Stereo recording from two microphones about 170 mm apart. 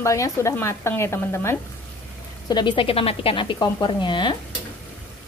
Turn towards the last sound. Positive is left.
turn(degrees=30)  # may be behind; listen again after turning